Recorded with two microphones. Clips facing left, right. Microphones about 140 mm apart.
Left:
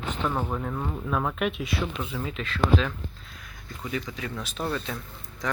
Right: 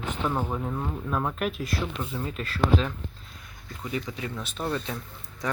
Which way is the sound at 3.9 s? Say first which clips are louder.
Even; 25° right (ahead or behind).